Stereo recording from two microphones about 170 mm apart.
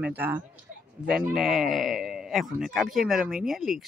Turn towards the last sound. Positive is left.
turn(degrees=0)  # may be behind; listen again after turning